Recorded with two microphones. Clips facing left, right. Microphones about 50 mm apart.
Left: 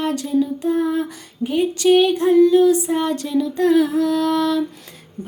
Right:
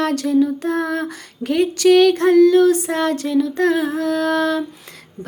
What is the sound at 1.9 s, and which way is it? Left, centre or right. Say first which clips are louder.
Child singing: right 2 dB; right.